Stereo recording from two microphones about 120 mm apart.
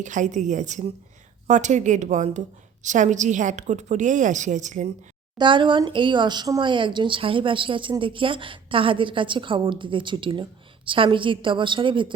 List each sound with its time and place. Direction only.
0.0 s a woman's voice: 90° right
2.8 s a woman's voice: 90° right
5.4 s speech: 40° right (ahead or behind)